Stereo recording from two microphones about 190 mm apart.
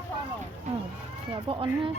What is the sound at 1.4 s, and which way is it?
Speech, 25° right (ahead or behind).